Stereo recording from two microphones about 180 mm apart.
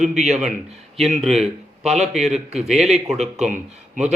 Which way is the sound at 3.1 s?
40° right (ahead or behind).